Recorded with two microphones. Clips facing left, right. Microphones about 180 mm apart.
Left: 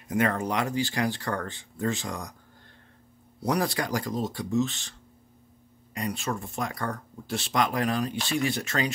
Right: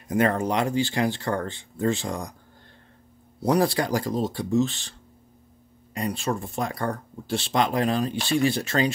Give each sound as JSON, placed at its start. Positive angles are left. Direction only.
{"t": 0.1, "sound": "speech", "side_deg": -30}
{"t": 3.4, "sound": "speech", "side_deg": -30}
{"t": 5.9, "sound": "speech", "side_deg": -30}